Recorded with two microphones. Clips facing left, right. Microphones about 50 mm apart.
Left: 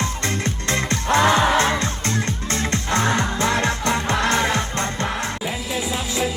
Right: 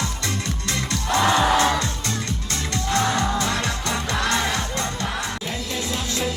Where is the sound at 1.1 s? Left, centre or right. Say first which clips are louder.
Left 2 dB; left.